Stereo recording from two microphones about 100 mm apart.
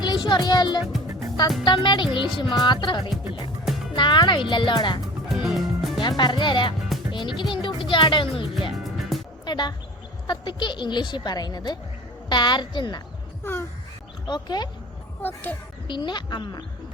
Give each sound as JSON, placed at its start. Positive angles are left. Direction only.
{"t": 0.0, "sound": "a woman's voice", "side_deg": 45}
{"t": 5.3, "sound": "music", "side_deg": -5}
{"t": 6.0, "sound": "a woman's voice", "side_deg": 45}
{"t": 7.1, "sound": "music", "side_deg": 55}
{"t": 8.7, "sound": "music", "side_deg": 0}
{"t": 9.5, "sound": "a woman's voice", "side_deg": 45}
{"t": 13.4, "sound": "a sound", "side_deg": 25}
{"t": 14.3, "sound": "a woman's voice", "side_deg": 45}
{"t": 15.2, "sound": "speech", "side_deg": 20}
{"t": 15.9, "sound": "a woman's voice", "side_deg": 50}